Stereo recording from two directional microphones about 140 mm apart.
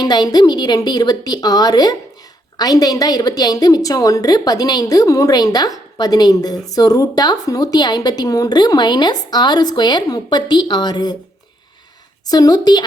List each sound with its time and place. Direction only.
0.0 s a woman's voice: 30° left (ahead or behind)
12.3 s a woman's voice: 25° left (ahead or behind)